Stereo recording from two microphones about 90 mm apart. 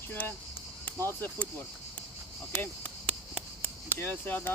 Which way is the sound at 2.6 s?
15° left (ahead or behind).